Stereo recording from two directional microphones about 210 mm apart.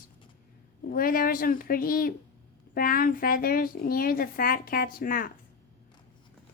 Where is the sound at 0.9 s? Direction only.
45° left (ahead or behind).